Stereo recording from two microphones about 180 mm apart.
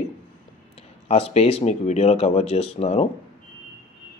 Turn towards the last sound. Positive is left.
turn(degrees=35)  # may be behind; listen again after turning